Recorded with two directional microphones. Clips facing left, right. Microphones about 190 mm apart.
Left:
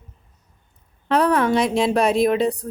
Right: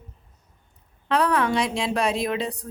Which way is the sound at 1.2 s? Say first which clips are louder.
Left 4 dB; 45° left (ahead or behind).